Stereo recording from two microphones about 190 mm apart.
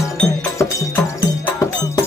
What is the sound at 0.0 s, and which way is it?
Music, 15° left (ahead or behind).